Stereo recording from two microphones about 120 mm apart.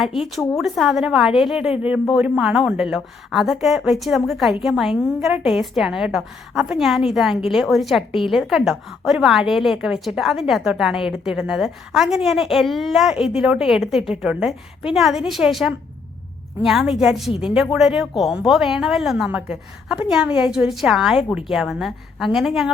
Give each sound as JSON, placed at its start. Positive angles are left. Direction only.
{"t": 0.0, "sound": "a woman's voice", "side_deg": 0}